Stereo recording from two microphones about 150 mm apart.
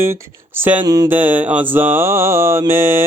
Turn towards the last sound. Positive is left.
turn(degrees=-15)  # may be behind; listen again after turning